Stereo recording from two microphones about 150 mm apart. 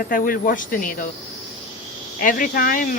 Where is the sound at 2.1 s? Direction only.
70° left (ahead or behind).